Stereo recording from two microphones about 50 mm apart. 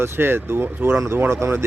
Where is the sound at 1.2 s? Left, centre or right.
Right.